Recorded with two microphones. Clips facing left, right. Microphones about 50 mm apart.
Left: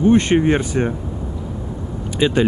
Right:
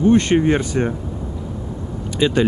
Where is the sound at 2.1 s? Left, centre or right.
Centre.